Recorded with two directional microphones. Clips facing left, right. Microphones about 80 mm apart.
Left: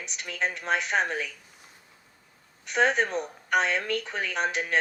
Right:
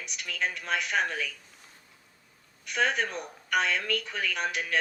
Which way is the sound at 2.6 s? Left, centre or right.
Left.